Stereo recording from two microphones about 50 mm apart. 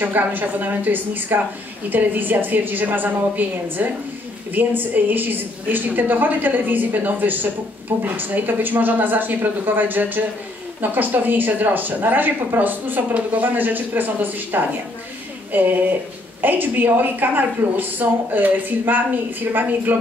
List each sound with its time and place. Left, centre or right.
0.0 s a woman's voice: right